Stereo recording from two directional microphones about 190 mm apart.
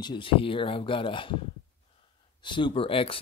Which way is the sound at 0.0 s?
25° left (ahead or behind).